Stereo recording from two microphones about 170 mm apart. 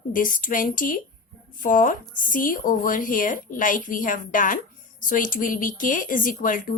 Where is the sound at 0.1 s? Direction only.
55° left (ahead or behind).